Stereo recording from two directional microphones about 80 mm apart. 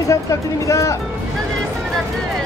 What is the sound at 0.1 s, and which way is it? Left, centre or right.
Speech, left.